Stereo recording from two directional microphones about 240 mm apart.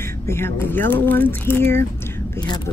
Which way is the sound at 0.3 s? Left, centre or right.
Centre.